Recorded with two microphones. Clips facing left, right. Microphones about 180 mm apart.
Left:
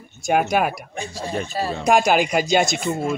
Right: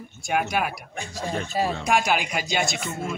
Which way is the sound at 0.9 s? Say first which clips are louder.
Left 3 dB; 15° left (ahead or behind).